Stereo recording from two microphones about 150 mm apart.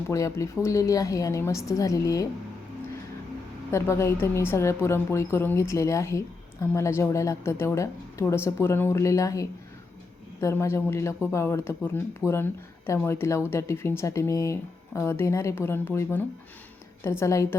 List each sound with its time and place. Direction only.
0.1 s a woman's voice: 20° left (ahead or behind)
3.7 s a woman's voice: 20° left (ahead or behind)